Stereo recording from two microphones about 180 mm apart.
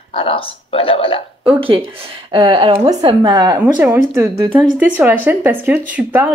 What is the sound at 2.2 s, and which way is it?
Speech, 30° right (ahead or behind).